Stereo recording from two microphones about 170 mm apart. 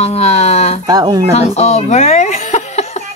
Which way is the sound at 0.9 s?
20° right (ahead or behind).